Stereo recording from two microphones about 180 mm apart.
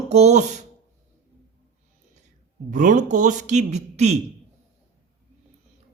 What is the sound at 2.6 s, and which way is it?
A man's voice, 45° right (ahead or behind).